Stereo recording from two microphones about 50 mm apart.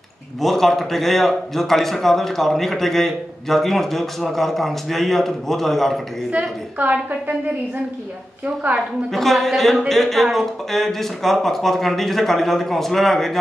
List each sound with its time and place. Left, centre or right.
0.4 s a man's voice: centre
6.8 s a woman's voice: right
8.6 s a woman's voice: right
9.1 s a man's voice: centre